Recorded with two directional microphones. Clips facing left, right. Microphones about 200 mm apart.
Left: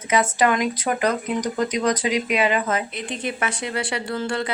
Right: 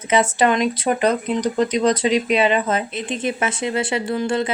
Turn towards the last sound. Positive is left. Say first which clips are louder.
# right 5 dB
turn(degrees=-20)  # may be behind; listen again after turning